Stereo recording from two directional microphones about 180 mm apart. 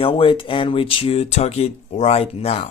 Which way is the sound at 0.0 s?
30° left (ahead or behind).